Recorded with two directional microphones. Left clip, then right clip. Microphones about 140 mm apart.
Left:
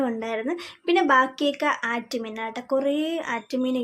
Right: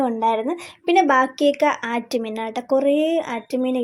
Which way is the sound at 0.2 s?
20° right (ahead or behind).